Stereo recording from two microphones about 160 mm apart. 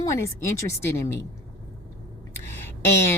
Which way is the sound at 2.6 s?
15° left (ahead or behind).